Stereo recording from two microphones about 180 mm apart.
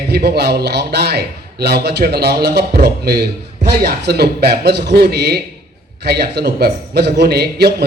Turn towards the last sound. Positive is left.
turn(degrees=-65)  # may be behind; listen again after turning